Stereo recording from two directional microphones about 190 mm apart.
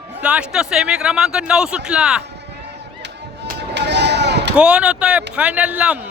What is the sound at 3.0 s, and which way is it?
Chop, 55° right (ahead or behind).